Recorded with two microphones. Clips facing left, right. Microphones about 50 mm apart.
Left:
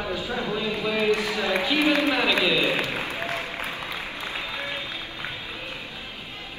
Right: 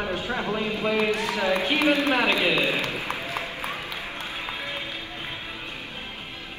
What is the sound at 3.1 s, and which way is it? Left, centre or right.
Music, left.